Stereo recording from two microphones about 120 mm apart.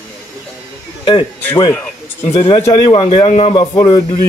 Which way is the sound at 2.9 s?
65° left (ahead or behind).